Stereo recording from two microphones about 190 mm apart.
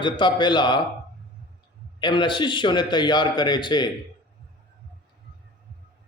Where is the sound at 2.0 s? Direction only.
25° left (ahead or behind).